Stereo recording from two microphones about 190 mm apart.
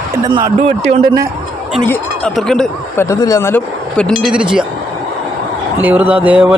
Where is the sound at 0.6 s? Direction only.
35° right (ahead or behind).